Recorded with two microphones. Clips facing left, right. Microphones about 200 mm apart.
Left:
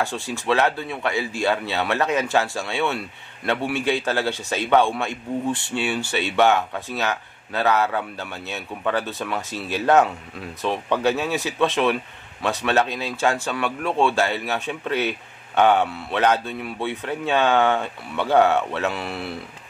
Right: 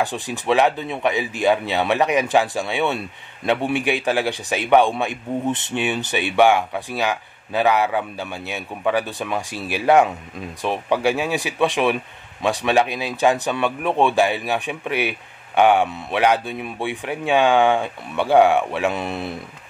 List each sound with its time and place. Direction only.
0.0 s a man's voice: 15° right (ahead or behind)